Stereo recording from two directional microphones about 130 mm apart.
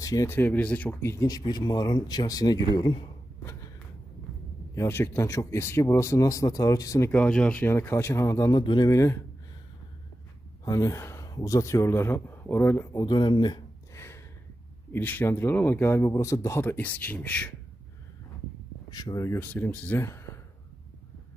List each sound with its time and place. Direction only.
0.0 s speech: 25° left (ahead or behind)
4.7 s speech: 15° left (ahead or behind)
7.1 s speech: 10° left (ahead or behind); by 9.2 s 25° left (ahead or behind)
10.6 s speech: 25° left (ahead or behind)
13.0 s speech: 35° left (ahead or behind)
13.9 s gasp: 20° left (ahead or behind)
14.9 s speech: 15° left (ahead or behind)
18.9 s speech: 30° left (ahead or behind)